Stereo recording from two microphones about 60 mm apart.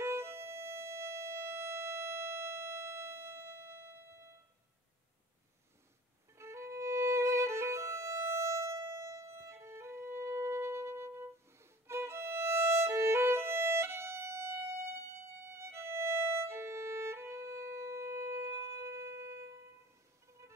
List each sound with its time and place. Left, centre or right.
0.0 s music: right
6.3 s violin: right